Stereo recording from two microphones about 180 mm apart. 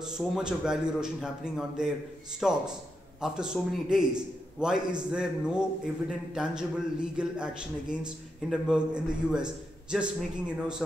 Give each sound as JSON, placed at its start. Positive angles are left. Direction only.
{"t": 0.1, "sound": "a man's voice", "side_deg": 0}